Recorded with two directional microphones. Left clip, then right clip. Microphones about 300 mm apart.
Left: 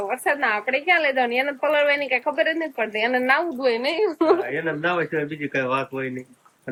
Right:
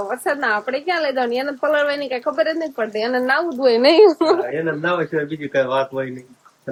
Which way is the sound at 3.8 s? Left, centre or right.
Right.